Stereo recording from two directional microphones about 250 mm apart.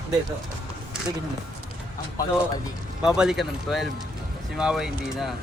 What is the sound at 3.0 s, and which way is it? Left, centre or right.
Speech, centre.